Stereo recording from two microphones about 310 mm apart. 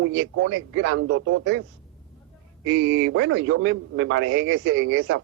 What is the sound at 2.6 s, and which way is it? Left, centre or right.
Speech, right.